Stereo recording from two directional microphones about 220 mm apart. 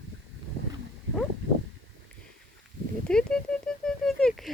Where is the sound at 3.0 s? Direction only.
5° left (ahead or behind).